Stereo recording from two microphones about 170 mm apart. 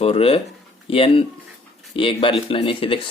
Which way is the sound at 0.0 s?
35° left (ahead or behind).